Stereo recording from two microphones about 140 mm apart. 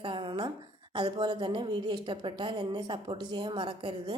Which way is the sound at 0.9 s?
35° right (ahead or behind).